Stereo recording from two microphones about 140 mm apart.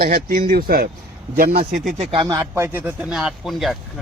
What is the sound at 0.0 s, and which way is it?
Speech, 85° right.